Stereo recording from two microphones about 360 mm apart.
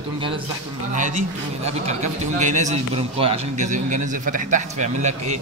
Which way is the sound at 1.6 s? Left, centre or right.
Centre.